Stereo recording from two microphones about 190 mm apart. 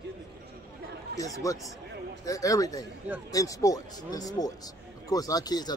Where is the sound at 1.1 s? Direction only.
20° left (ahead or behind).